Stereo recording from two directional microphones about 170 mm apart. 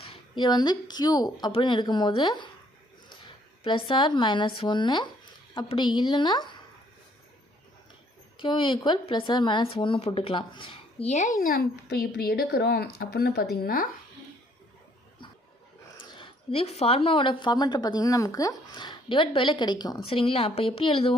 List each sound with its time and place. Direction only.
0.0 s speech: 30° left (ahead or behind)
3.6 s speech: 30° left (ahead or behind)
8.4 s speech: 30° left (ahead or behind); by 13.8 s 60° left (ahead or behind)
16.0 s speech: 30° left (ahead or behind)